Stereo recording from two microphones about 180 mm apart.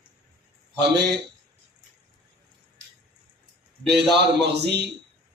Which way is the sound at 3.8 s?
70° right (ahead or behind).